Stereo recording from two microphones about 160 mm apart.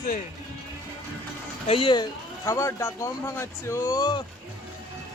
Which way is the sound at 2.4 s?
20° left (ahead or behind).